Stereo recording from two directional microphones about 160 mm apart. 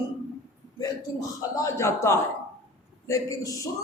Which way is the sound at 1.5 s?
20° left (ahead or behind).